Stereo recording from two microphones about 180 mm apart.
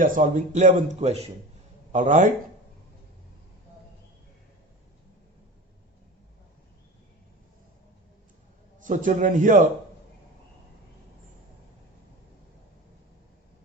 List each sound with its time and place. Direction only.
0.0 s speech: 45° right (ahead or behind)
8.8 s a man's voice: 45° right (ahead or behind)